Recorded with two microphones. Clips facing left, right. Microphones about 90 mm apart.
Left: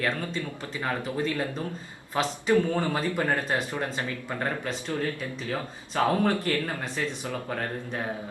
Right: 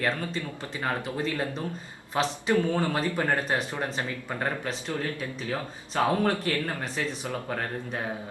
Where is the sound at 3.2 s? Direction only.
Centre (ahead or behind).